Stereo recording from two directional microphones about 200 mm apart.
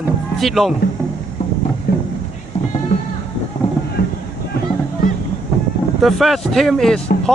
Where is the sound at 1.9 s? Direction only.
55° left (ahead or behind).